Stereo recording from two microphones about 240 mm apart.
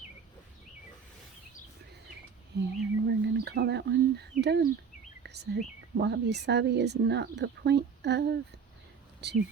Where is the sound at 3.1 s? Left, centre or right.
Right.